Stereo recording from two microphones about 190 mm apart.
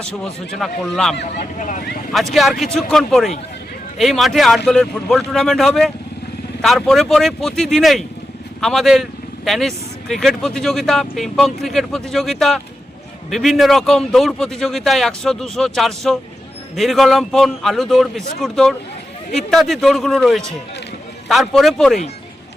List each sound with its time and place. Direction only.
0.0 s speech: centre (ahead or behind)
1.5 s speech: 40° left (ahead or behind)
2.1 s speech: centre (ahead or behind)